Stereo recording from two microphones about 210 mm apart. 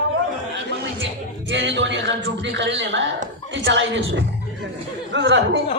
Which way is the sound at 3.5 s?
65° right (ahead or behind).